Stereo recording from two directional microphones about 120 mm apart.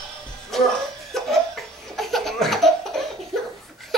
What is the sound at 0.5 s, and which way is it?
Cough, centre (ahead or behind).